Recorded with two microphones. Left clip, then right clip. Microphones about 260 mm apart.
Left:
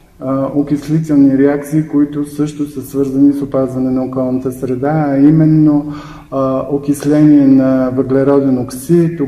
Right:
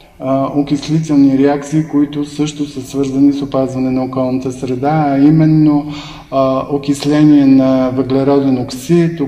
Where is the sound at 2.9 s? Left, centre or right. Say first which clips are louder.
Left 1 dB; left.